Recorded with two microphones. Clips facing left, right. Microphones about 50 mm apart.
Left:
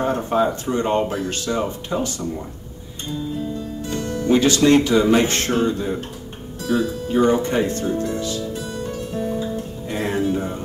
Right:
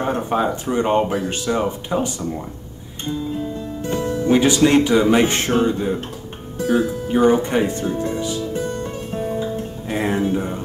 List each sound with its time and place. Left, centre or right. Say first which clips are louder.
0.0 s speech: left 1 dB; centre
3.9 s music: right 1 dB; right
4.6 s speech: left 1 dB; centre
6.7 s music: right 1 dB; right